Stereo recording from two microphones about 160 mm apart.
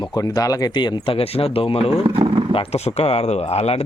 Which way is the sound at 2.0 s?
35° right (ahead or behind).